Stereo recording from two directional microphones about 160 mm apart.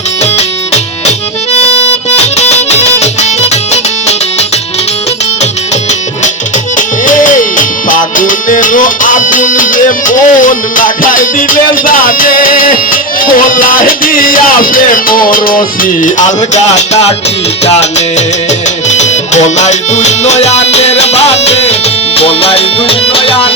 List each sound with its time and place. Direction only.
2.1 s music: 45° left (ahead or behind)
6.7 s music: 55° left (ahead or behind)
16.7 s music: 45° left (ahead or behind)